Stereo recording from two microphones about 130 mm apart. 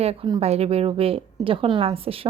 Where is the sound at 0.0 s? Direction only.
50° right (ahead or behind).